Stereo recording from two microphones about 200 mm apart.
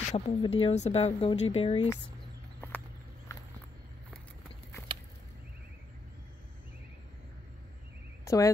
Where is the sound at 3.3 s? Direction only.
15° left (ahead or behind).